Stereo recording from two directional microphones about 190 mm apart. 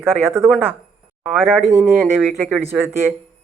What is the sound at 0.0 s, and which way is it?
A man's voice, 10° right (ahead or behind).